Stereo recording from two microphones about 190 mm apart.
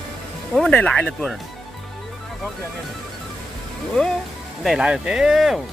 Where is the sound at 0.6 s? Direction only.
5° left (ahead or behind).